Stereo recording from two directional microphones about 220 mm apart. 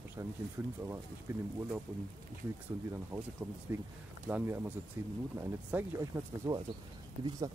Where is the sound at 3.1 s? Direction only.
15° right (ahead or behind).